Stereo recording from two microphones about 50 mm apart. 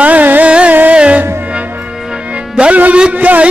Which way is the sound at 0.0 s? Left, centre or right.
Right.